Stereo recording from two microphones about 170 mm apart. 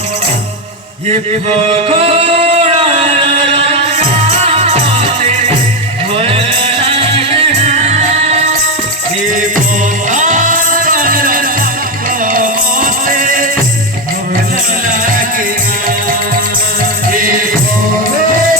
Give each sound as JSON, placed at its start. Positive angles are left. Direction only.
{"t": 1.9, "sound": "music", "side_deg": -35}
{"t": 10.1, "sound": "music", "side_deg": -45}
{"t": 14.8, "sound": "music", "side_deg": -50}
{"t": 17.1, "sound": "music", "side_deg": -55}